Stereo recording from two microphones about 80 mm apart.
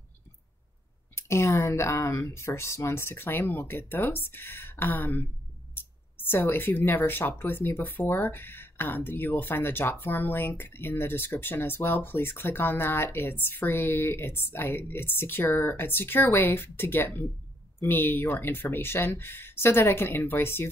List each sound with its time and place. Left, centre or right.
1.1 s speech: left